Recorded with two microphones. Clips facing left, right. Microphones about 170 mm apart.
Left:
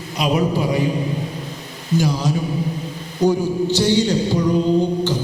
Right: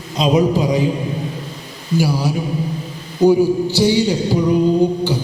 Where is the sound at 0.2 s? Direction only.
20° right (ahead or behind).